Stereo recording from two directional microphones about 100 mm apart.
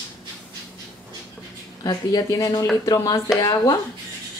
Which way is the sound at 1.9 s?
40° left (ahead or behind).